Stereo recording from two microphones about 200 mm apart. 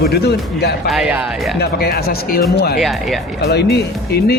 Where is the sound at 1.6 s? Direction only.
50° left (ahead or behind).